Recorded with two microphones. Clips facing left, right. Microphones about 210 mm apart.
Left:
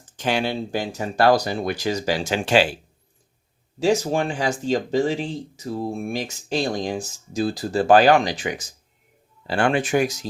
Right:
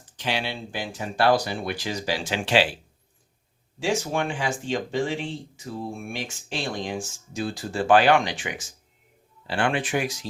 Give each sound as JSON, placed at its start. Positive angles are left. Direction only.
{"t": 0.0, "sound": "speech", "side_deg": 45}
{"t": 3.8, "sound": "speech", "side_deg": 40}